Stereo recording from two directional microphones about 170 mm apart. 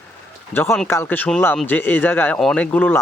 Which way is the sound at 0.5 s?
15° left (ahead or behind).